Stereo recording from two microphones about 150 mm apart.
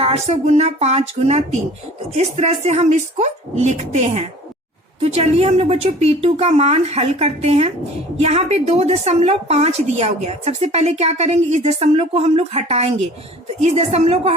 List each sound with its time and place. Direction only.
0.0 s a woman's voice: 45° right (ahead or behind)